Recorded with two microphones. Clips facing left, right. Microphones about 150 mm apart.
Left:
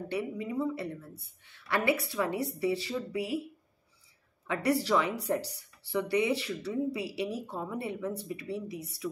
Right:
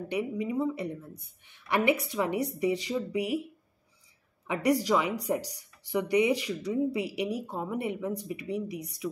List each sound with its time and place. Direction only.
0.1 s speech: 15° right (ahead or behind)
4.5 s speech: 15° right (ahead or behind)